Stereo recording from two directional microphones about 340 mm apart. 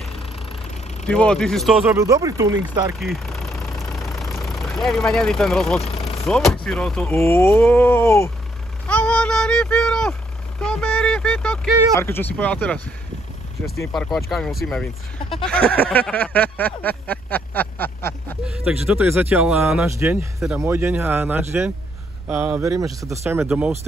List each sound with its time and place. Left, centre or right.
1.0 s speech: centre
3.0 s vehicle: centre
5.8 s vehicle: centre
6.2 s a sound: centre
22.3 s speech: centre